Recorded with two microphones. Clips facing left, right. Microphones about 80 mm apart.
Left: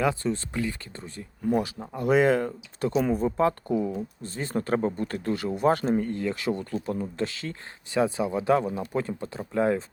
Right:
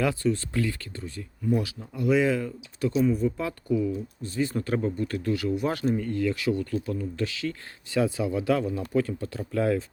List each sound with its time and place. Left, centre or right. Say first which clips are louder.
0.0 s speech: even; left